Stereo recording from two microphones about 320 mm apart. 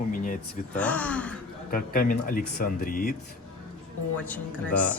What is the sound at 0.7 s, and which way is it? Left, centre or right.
Speech, centre.